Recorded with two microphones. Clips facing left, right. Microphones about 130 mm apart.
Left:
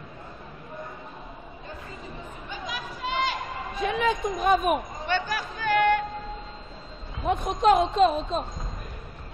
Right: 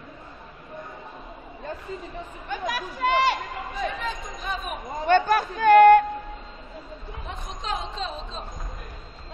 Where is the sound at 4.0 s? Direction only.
60° left (ahead or behind).